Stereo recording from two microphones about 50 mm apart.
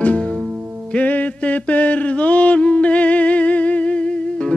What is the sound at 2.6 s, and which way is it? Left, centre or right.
Humming, left.